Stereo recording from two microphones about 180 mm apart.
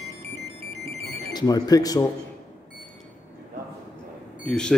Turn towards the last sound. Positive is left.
turn(degrees=5)  # may be behind; listen again after turning